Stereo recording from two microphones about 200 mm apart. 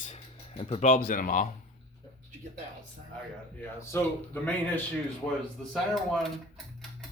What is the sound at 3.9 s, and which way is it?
Speech, 10° left (ahead or behind).